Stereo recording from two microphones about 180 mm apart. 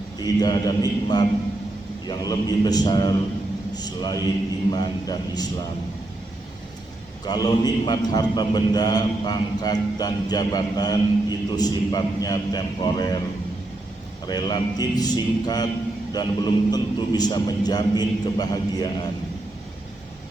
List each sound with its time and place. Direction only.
0.2 s a man's voice: 20° left (ahead or behind)
7.3 s a man's voice: 20° left (ahead or behind)
14.3 s a man's voice: 25° left (ahead or behind)